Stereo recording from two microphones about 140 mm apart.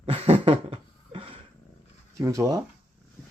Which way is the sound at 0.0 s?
45° right (ahead or behind).